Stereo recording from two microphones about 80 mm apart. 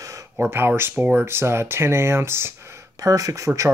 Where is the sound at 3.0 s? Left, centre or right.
Right.